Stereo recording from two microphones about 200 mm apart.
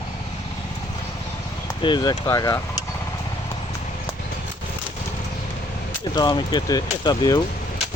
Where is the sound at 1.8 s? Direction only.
25° left (ahead or behind).